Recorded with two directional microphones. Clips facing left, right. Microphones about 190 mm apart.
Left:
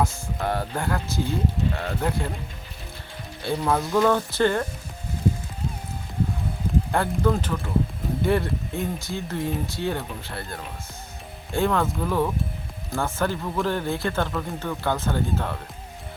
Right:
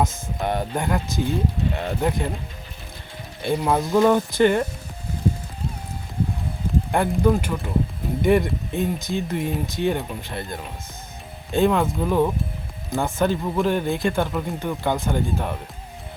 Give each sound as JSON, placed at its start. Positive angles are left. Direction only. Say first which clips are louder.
{"t": 0.0, "sound": "speech", "louder": "right 2 dB", "side_deg": -20}
{"t": 3.4, "sound": "speech", "louder": "right 3 dB", "side_deg": -15}
{"t": 6.9, "sound": "speech", "louder": "right 4 dB", "side_deg": -15}